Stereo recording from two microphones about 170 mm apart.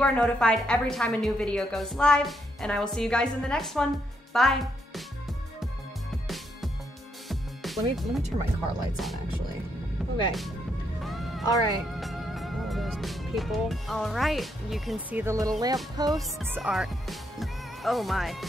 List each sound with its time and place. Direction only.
0.0 s a woman's voice: 5° left (ahead or behind)
6.2 s music: centre (ahead or behind)
8.9 s a woman's voice: centre (ahead or behind)
11.1 s speech: centre (ahead or behind); by 16.2 s 20° right (ahead or behind)
16.5 s speech: 5° right (ahead or behind)